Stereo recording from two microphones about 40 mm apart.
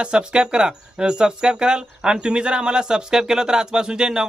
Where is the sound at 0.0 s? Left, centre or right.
Right.